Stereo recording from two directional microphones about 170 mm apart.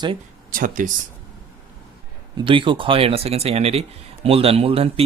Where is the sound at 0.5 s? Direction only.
55° right (ahead or behind).